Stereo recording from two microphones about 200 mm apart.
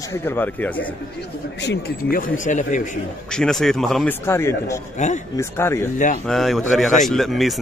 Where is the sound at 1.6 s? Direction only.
55° left (ahead or behind).